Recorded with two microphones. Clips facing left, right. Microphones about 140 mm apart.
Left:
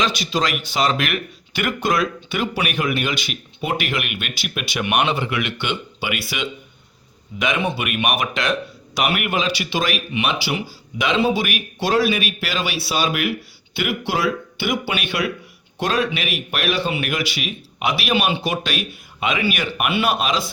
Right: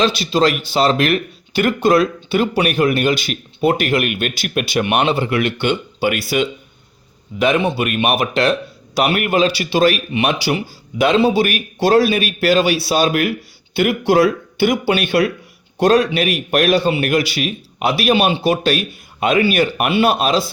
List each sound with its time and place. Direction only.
0.0 s speech: 30° right (ahead or behind)